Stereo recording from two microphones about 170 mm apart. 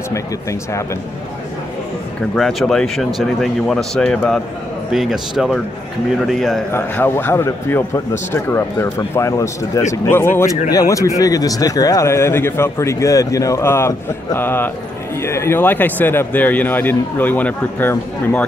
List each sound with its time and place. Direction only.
0.1 s speech: 15° left (ahead or behind)
2.3 s speech: 5° left (ahead or behind)
6.7 s speech: 15° left (ahead or behind)